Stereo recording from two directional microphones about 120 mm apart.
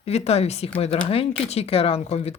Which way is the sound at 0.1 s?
60° left (ahead or behind).